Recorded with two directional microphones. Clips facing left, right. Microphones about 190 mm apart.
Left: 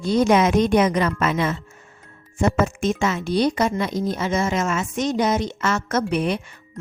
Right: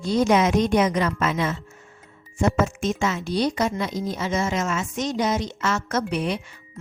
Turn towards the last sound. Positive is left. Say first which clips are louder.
# left 3 dB
turn(degrees=55)  # may be behind; listen again after turning